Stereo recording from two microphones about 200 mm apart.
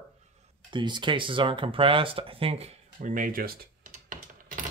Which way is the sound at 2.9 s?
40° right (ahead or behind).